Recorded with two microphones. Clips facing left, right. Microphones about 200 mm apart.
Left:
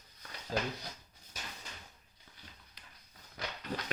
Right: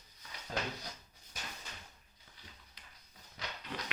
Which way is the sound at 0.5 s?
35° left (ahead or behind).